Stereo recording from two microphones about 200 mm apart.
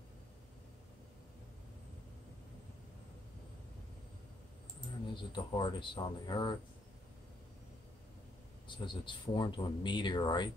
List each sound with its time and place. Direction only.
5.1 s speech: 25° left (ahead or behind)
8.6 s speech: 25° left (ahead or behind)